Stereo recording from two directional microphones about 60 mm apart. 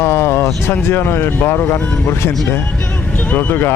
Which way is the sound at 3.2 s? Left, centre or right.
Left.